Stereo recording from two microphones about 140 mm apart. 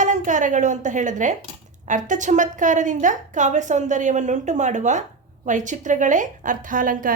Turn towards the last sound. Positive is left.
turn(degrees=-75)  # may be behind; listen again after turning